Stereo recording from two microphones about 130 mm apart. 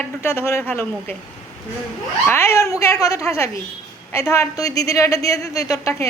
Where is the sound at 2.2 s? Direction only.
20° left (ahead or behind).